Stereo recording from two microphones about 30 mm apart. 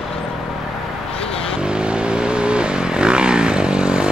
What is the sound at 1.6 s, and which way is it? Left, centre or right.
Vehicle, right.